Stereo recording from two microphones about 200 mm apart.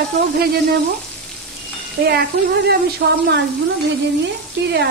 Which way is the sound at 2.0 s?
55° right (ahead or behind).